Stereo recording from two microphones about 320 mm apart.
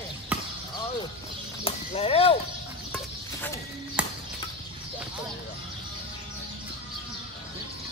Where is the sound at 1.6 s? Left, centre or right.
Centre.